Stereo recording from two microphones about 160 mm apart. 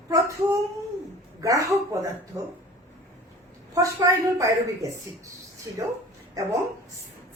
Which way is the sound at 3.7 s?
20° right (ahead or behind).